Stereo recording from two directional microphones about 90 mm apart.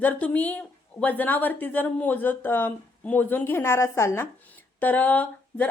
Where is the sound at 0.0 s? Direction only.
20° left (ahead or behind).